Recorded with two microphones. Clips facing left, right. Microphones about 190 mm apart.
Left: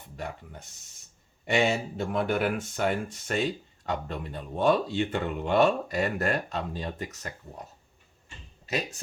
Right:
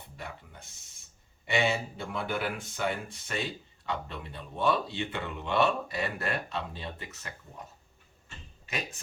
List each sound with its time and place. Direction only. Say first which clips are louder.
1.5 s speech: left 3 dB; 45° left (ahead or behind)